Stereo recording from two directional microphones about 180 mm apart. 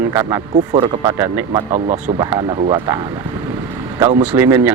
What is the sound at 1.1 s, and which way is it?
Speech, 10° right (ahead or behind).